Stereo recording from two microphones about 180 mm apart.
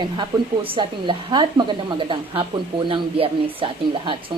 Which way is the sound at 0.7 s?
25° right (ahead or behind).